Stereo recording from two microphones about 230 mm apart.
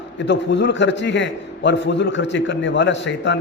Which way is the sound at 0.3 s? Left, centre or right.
Left.